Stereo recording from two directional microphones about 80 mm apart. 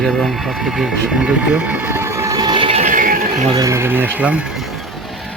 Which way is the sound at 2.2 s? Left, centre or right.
Right.